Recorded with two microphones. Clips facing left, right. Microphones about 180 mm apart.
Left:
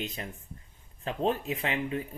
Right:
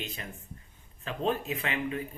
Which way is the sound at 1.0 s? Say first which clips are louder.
Left 1 dB; 25° left (ahead or behind).